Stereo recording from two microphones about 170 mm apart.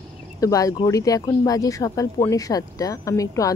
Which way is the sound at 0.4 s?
20° left (ahead or behind).